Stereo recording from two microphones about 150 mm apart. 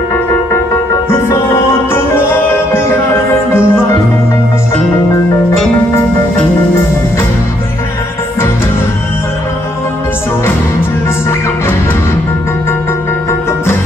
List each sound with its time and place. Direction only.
1.3 s music: 15° left (ahead or behind)